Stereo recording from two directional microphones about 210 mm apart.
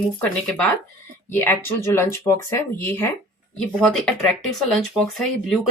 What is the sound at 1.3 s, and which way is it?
Speech, 10° left (ahead or behind).